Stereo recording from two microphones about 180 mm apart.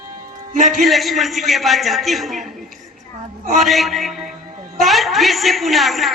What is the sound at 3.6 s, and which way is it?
A man's voice, centre (ahead or behind).